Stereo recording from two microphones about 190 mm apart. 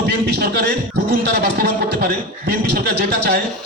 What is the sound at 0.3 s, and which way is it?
Speech, 55° right (ahead or behind).